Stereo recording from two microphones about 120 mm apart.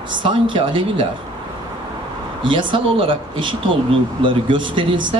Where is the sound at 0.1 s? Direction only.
45° right (ahead or behind).